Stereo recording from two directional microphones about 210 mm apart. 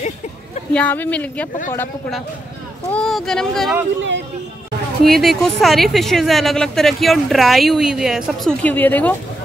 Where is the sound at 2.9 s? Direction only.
Centre (ahead or behind).